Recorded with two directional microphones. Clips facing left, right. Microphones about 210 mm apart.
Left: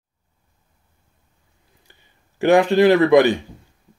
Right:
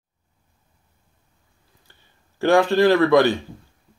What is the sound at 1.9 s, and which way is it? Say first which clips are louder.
A man's voice: left 1 dB; 15° left (ahead or behind).